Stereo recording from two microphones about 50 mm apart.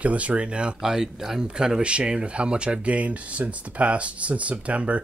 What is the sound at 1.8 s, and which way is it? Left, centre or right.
Speech, right.